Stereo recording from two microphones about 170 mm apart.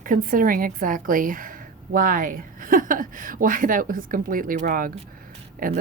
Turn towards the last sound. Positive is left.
turn(degrees=-55)  # may be behind; listen again after turning